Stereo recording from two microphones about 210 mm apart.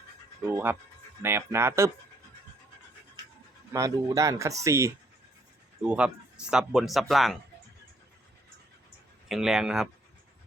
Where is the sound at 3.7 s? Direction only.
15° right (ahead or behind); by 7.4 s centre (ahead or behind).